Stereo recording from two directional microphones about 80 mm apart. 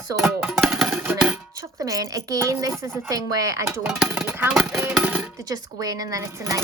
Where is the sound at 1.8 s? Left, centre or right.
Right.